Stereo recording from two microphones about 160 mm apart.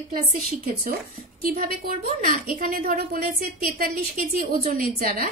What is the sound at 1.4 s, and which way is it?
A woman's voice, 70° right (ahead or behind).